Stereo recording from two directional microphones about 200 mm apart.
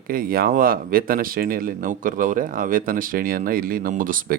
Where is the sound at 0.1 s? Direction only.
45° right (ahead or behind).